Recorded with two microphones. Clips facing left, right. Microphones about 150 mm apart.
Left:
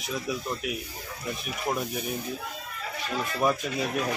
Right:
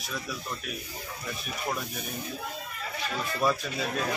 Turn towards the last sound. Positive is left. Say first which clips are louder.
# left 3 dB
turn(degrees=15)  # may be behind; listen again after turning